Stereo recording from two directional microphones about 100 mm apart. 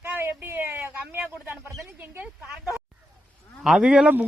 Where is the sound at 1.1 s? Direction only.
20° right (ahead or behind).